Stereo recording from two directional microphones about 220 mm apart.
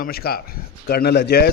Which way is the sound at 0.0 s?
45° left (ahead or behind).